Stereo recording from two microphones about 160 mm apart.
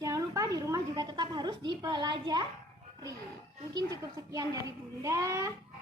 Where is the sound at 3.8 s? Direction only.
25° right (ahead or behind).